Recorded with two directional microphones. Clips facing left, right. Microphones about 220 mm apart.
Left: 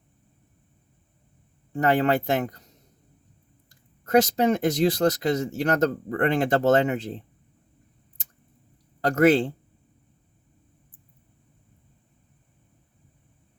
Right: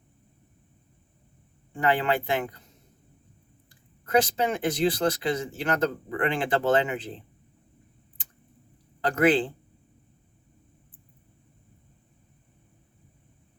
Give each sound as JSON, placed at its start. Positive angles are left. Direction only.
{"t": 1.7, "sound": "speech", "side_deg": 45}
{"t": 3.7, "sound": "speech", "side_deg": 40}
{"t": 9.0, "sound": "speech", "side_deg": 45}